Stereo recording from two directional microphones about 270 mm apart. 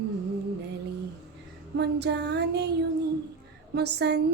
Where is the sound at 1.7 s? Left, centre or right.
Right.